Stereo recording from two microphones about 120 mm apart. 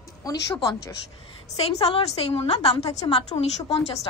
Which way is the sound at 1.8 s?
60° left (ahead or behind).